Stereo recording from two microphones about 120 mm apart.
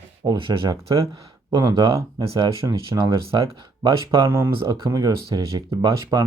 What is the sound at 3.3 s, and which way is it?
Speech, 35° right (ahead or behind).